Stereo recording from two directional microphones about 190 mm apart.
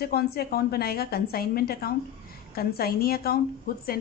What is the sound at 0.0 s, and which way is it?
A woman's voice, 55° left (ahead or behind).